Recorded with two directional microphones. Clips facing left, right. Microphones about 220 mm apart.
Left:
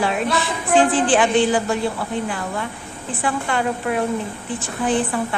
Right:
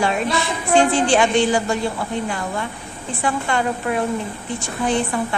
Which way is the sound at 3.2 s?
5° left (ahead or behind).